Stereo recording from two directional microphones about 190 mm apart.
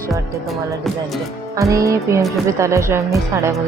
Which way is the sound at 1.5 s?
15° right (ahead or behind).